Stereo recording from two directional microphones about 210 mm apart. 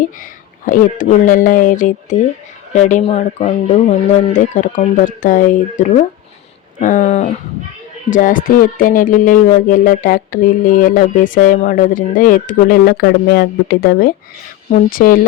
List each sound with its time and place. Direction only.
0.6 s music: 40° left (ahead or behind)
14.7 s speech: 40° left (ahead or behind)